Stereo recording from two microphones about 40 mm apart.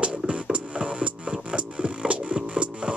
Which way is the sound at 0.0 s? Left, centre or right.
Right.